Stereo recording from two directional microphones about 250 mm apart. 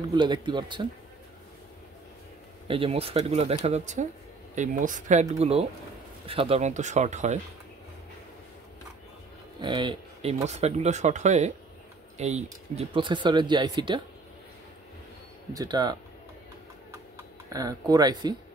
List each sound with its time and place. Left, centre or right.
0.1 s speech: centre
2.7 s speech: right
9.6 s speech: centre
15.5 s speech: centre
17.2 s speech: centre